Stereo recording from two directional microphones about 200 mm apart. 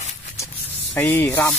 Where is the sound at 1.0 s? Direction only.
10° left (ahead or behind).